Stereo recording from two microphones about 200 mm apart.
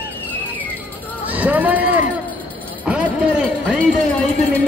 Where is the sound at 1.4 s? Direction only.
10° right (ahead or behind).